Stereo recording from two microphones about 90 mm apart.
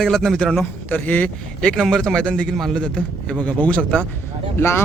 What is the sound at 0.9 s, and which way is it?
Speech, 20° left (ahead or behind).